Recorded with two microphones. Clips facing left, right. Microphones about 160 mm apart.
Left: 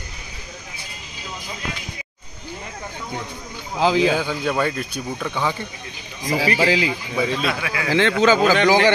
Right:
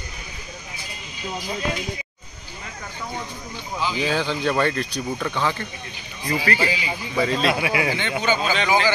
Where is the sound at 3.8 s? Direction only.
90° left.